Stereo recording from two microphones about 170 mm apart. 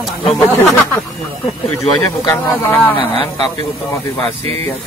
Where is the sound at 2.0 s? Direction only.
15° left (ahead or behind).